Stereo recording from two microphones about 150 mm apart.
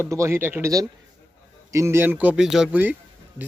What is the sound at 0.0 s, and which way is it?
Speech, 20° right (ahead or behind).